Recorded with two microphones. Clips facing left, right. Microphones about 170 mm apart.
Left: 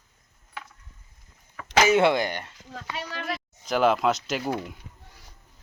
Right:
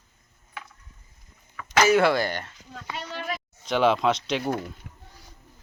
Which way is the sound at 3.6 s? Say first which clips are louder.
Even; centre (ahead or behind).